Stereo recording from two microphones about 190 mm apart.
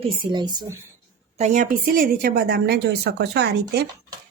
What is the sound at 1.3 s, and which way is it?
A woman's voice, 40° right (ahead or behind).